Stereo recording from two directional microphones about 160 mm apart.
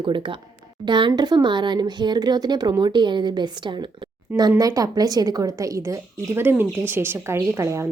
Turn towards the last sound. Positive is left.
turn(degrees=-15)  # may be behind; listen again after turning